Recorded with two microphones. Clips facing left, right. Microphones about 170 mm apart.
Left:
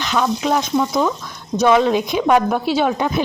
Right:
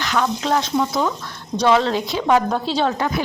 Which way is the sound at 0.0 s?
15° left (ahead or behind).